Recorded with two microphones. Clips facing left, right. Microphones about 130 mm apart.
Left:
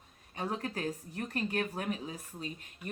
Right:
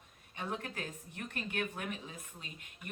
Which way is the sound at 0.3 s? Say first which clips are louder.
Left 4 dB; 40° left (ahead or behind).